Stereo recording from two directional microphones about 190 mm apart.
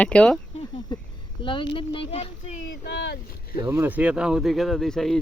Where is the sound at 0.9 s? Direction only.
20° left (ahead or behind).